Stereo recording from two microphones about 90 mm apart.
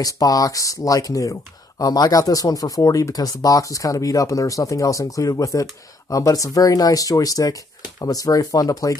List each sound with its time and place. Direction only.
0.0 s speech: 45° left (ahead or behind)